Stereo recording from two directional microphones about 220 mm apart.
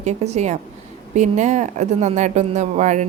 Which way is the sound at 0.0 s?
30° right (ahead or behind).